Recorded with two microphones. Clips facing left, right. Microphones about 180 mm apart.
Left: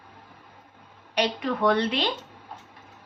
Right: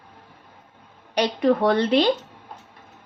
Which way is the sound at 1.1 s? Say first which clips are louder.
Right 7 dB; 35° right (ahead or behind).